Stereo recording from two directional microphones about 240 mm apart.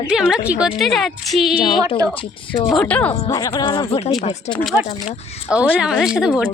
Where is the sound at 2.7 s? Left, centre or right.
Centre; by 4.1 s left.